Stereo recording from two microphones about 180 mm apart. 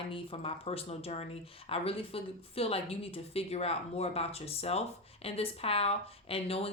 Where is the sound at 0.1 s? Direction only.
30° left (ahead or behind).